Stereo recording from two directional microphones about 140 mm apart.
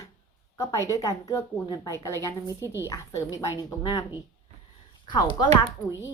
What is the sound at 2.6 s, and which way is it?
Speech, 20° right (ahead or behind).